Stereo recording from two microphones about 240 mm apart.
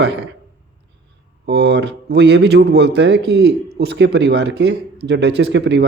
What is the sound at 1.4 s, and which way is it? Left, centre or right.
Speech, right.